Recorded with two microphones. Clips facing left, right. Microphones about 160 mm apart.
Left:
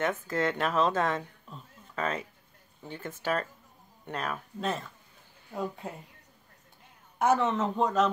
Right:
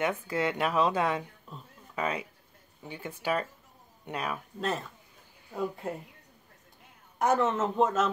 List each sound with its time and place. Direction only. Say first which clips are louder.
0.0 s a man's voice: even; 10° right (ahead or behind)
7.2 s a man's voice: even; centre (ahead or behind)